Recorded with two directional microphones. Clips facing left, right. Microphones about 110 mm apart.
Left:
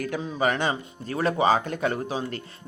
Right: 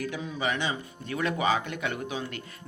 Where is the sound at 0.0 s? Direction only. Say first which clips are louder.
Left 5 dB; 50° left (ahead or behind).